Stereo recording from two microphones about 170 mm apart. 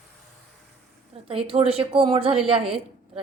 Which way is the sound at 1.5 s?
35° right (ahead or behind).